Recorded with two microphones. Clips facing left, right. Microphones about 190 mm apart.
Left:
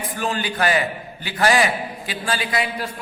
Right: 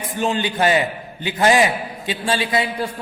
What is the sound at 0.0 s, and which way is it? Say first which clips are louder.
A man's voice: right 4 dB; 25° right (ahead or behind).